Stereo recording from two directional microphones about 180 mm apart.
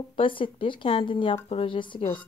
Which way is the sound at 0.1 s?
30° left (ahead or behind).